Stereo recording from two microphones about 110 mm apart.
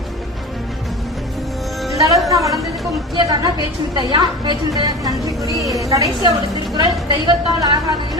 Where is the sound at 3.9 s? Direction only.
45° right (ahead or behind).